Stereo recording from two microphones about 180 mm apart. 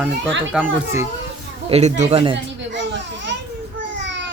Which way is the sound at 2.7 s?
80° right.